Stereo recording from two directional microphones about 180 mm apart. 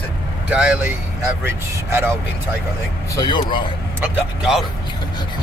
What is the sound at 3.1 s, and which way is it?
Speech, 25° left (ahead or behind).